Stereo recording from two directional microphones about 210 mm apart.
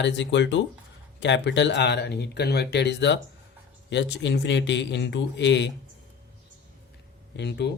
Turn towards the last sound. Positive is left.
turn(degrees=55)  # may be behind; listen again after turning